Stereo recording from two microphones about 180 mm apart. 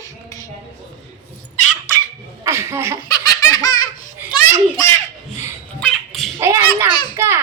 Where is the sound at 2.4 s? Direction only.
15° right (ahead or behind).